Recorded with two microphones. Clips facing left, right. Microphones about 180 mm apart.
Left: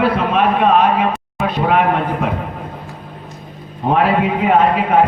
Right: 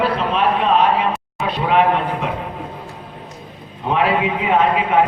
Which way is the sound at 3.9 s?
45° left (ahead or behind).